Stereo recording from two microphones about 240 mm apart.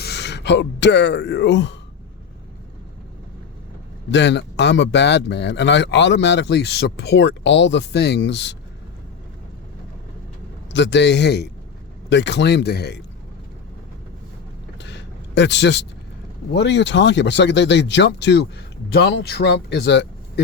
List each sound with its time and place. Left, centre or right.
0.0 s speech: left
4.1 s speech: left
10.7 s speech: left
14.8 s a sound: left
16.6 s speech: left